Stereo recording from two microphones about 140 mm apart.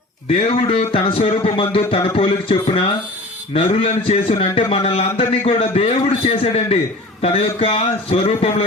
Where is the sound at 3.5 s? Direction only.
55° left (ahead or behind).